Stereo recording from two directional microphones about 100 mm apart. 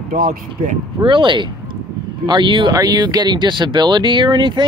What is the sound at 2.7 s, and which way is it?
Speech, 40° right (ahead or behind).